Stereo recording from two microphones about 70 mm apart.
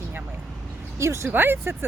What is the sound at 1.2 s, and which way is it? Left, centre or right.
Speech, right.